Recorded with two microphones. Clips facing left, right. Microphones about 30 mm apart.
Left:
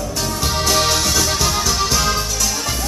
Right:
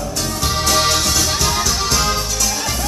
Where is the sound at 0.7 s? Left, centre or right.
Centre.